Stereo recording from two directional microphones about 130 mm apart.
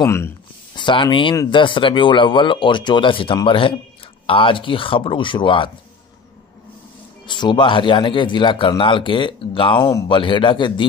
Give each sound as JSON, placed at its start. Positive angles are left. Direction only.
{"t": 0.0, "sound": "speech", "side_deg": 20}
{"t": 0.7, "sound": "speech", "side_deg": 35}
{"t": 7.2, "sound": "speech", "side_deg": 35}